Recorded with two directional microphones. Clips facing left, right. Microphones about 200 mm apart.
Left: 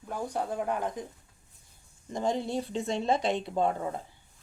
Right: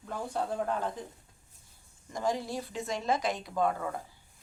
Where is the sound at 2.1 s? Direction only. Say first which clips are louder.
Left 3 dB; 25° left (ahead or behind).